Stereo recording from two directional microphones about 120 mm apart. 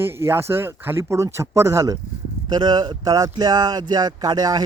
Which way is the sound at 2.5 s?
35° right (ahead or behind).